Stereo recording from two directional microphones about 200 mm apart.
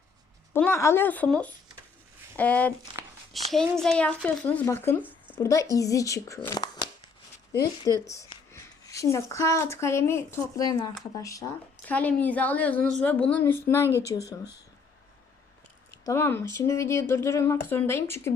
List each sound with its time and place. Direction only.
0.5 s speech: 10° left (ahead or behind)
3.0 s a sound: 15° right (ahead or behind)
3.3 s a child's voice: centre (ahead or behind); by 14.3 s 15° left (ahead or behind)
16.0 s speech: 10° left (ahead or behind)